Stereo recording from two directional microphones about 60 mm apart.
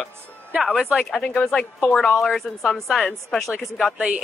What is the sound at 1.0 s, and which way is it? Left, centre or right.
Speech, centre.